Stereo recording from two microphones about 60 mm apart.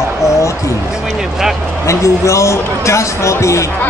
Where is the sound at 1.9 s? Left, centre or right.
Left.